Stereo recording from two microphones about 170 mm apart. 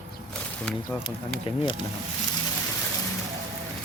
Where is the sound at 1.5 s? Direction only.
30° left (ahead or behind).